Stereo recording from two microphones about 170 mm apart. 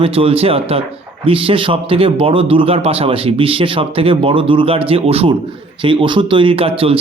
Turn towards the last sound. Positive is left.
turn(degrees=-35)  # may be behind; listen again after turning